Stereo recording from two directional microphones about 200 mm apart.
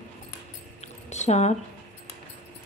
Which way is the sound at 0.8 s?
35° left (ahead or behind).